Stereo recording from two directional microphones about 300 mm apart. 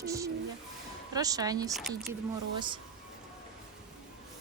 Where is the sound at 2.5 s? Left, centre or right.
Centre.